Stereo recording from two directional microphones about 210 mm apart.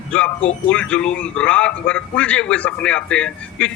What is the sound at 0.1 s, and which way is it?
A man's voice, 5° left (ahead or behind).